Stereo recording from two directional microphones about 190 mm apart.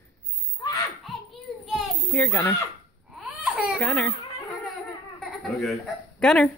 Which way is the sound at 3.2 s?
5° right (ahead or behind).